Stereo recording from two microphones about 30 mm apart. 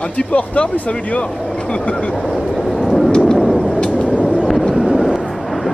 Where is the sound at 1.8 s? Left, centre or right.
Left.